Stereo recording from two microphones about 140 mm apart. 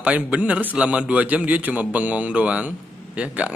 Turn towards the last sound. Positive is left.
turn(degrees=-10)  # may be behind; listen again after turning